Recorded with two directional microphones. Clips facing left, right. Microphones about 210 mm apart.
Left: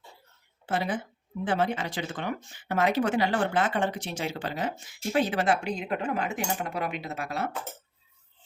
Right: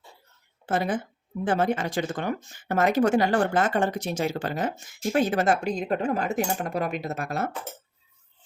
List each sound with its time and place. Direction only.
0.6 s a woman's voice: 45° right (ahead or behind)